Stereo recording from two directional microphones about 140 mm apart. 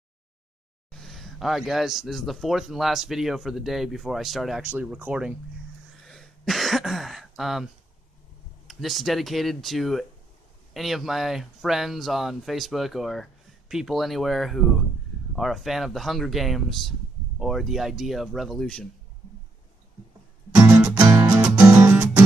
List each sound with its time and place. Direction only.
0.9 s speech: centre (ahead or behind)
6.0 s throat clearing: centre (ahead or behind)
8.6 s speech: centre (ahead or behind)
20.5 s music: 25° right (ahead or behind)